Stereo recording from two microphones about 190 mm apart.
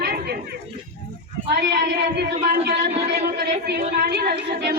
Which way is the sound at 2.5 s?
60° right (ahead or behind).